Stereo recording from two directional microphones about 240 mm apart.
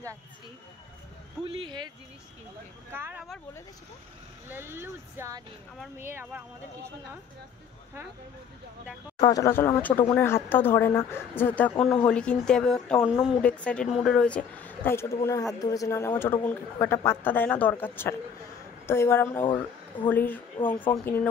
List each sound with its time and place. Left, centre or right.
1.4 s a man's voice: right
2.9 s speech: centre
4.5 s speech: centre
9.3 s a woman's voice: centre
19.4 s speech: centre
20.1 s a woman's voice: centre